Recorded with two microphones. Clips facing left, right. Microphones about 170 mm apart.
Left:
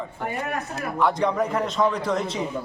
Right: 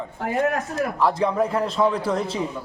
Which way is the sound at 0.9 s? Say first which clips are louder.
Even; 5° right (ahead or behind).